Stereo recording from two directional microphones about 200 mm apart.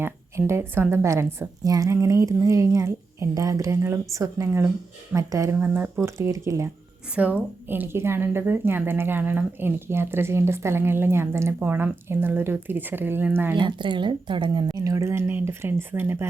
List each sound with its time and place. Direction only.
0.0 s speech: 15° right (ahead or behind)
13.6 s speech: 25° right (ahead or behind)